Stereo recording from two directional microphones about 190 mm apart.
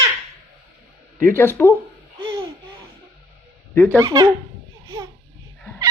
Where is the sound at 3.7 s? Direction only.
10° left (ahead or behind).